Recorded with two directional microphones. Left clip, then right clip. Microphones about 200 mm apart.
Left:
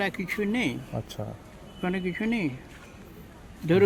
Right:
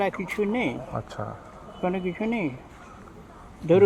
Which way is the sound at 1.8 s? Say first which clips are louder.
Right 3 dB; 90° left.